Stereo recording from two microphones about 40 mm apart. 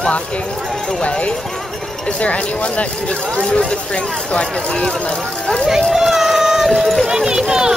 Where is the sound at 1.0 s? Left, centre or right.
Left.